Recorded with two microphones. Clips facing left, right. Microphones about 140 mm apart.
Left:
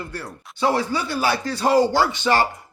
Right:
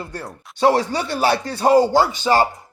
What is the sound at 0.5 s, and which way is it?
Speech, 70° right (ahead or behind).